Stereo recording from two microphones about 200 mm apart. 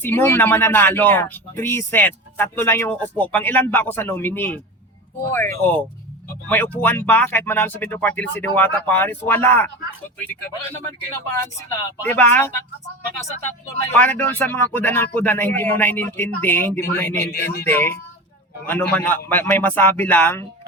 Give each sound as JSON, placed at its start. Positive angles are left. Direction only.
{"t": 0.0, "sound": "speech", "side_deg": 10}
{"t": 12.0, "sound": "speech", "side_deg": 10}
{"t": 17.2, "sound": "speech", "side_deg": 55}
{"t": 17.7, "sound": "speech", "side_deg": 10}